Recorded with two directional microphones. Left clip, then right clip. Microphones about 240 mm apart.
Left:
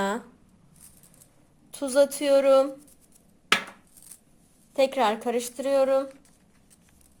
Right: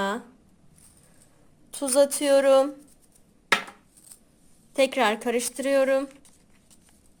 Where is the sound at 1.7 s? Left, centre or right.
Centre.